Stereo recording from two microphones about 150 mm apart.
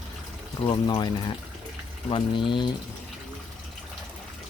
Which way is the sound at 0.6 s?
30° left (ahead or behind).